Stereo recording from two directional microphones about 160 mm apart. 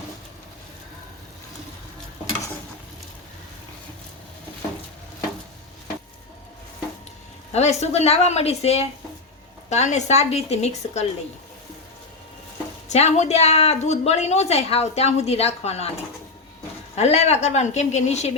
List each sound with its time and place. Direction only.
7.5 s a woman's voice: 45° left (ahead or behind)
12.9 s a woman's voice: 45° left (ahead or behind)
16.9 s a woman's voice: 40° left (ahead or behind)